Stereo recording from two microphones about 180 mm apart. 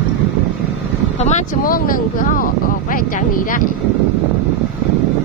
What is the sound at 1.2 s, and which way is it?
Speech, 40° left (ahead or behind).